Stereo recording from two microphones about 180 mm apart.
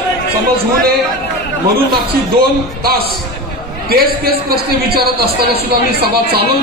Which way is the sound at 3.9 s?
60° right (ahead or behind).